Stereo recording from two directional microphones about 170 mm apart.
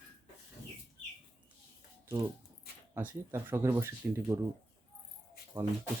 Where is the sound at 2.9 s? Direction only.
15° right (ahead or behind).